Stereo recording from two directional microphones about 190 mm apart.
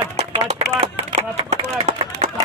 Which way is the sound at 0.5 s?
30° right (ahead or behind).